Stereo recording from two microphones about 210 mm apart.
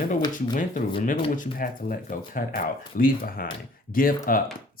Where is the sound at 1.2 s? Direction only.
40° left (ahead or behind).